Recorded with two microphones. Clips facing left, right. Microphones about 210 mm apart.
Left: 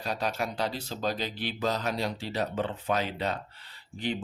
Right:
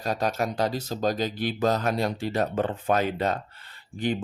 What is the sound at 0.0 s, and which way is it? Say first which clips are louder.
Speech: right 5 dB; 45° right (ahead or behind).